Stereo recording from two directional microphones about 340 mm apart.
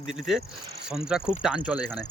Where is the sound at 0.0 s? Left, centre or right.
Centre.